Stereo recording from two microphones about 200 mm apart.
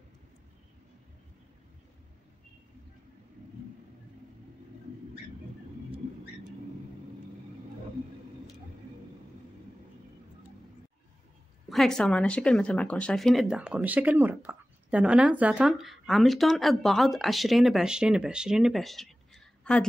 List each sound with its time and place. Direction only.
11.7 s speech: centre (ahead or behind)